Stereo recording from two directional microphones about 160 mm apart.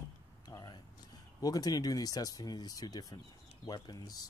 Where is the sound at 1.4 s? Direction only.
25° left (ahead or behind).